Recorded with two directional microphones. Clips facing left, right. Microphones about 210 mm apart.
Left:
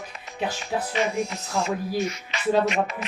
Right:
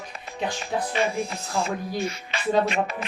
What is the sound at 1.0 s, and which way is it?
Speech, 30° right (ahead or behind).